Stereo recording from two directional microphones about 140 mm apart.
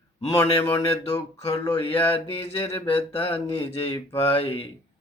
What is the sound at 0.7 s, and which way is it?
Mantra, 45° left (ahead or behind).